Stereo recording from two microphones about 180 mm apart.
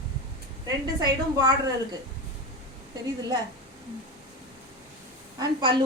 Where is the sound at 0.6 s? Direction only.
20° right (ahead or behind).